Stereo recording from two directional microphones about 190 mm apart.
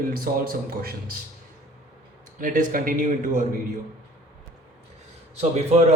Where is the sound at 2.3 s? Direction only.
45° right (ahead or behind).